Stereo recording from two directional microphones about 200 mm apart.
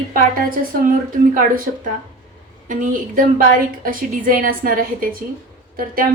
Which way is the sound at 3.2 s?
45° right (ahead or behind).